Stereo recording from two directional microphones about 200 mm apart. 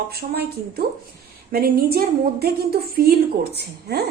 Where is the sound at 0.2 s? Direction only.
55° right (ahead or behind).